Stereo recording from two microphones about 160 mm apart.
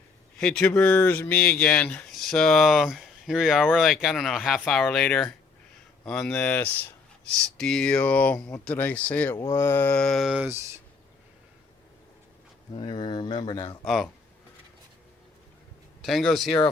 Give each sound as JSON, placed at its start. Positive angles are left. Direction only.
{"t": 0.3, "sound": "speech", "side_deg": 5}
{"t": 12.7, "sound": "speech", "side_deg": 30}
{"t": 13.8, "sound": "speech", "side_deg": 0}
{"t": 16.0, "sound": "speech", "side_deg": 0}